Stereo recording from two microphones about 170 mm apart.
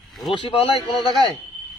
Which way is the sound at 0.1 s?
Centre (ahead or behind).